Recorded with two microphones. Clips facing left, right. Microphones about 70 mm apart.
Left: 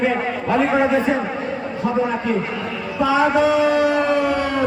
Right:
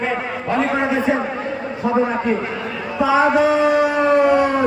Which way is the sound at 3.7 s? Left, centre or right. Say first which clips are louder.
Right 1 dB; centre.